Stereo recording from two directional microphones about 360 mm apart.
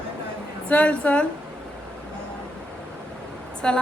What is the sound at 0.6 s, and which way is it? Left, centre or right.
Speech, centre.